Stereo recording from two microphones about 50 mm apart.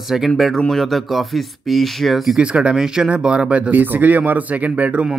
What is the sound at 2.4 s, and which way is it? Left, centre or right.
Speech, right.